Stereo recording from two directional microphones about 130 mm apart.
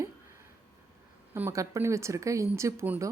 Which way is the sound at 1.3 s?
20° right (ahead or behind).